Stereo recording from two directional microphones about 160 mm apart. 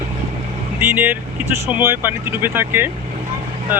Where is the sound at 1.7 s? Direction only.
10° right (ahead or behind).